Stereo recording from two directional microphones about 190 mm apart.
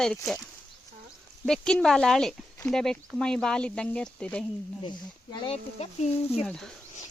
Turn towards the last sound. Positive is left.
turn(degrees=5)  # may be behind; listen again after turning